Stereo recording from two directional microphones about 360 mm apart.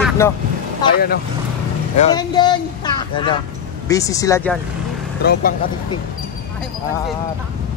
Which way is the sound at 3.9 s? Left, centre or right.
Centre.